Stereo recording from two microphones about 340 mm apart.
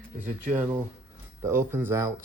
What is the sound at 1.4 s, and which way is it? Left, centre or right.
Speech, centre.